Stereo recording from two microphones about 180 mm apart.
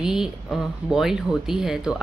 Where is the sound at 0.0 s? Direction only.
5° right (ahead or behind).